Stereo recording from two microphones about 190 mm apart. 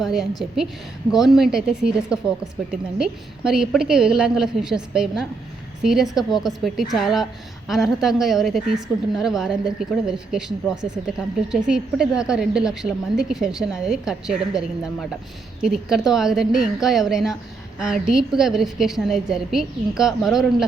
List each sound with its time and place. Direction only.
0.0 s a woman's voice: centre (ahead or behind)
10.8 s speech: 20° right (ahead or behind)
11.5 s a woman's voice: 5° right (ahead or behind)